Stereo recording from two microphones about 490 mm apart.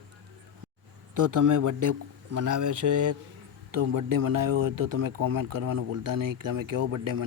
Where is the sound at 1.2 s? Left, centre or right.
Right.